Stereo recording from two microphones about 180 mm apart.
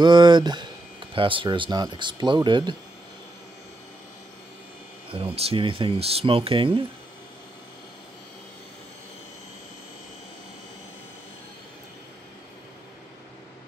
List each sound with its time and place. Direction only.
0.0 s speech: 25° right (ahead or behind)
5.1 s speech: 30° right (ahead or behind)